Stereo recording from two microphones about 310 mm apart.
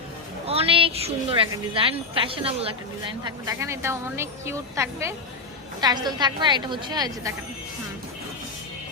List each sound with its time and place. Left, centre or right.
0.4 s a woman's voice: centre